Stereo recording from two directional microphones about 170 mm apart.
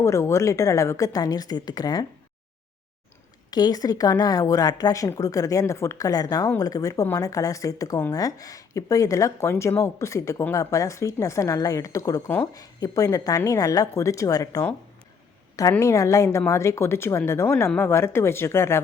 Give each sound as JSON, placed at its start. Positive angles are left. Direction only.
{"t": 0.0, "sound": "speech", "side_deg": 15}
{"t": 3.5, "sound": "speech", "side_deg": 25}